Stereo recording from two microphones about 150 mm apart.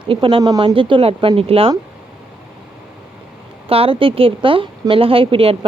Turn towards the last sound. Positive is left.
turn(degrees=-40)  # may be behind; listen again after turning